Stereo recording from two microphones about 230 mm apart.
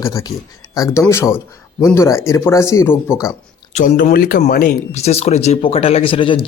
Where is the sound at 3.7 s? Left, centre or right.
Left.